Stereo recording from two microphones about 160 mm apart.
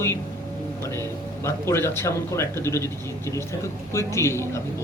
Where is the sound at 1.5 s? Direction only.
15° left (ahead or behind).